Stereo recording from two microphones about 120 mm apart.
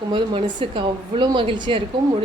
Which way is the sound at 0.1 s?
40° right (ahead or behind).